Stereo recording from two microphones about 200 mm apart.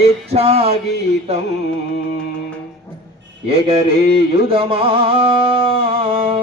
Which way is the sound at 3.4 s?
30° right (ahead or behind).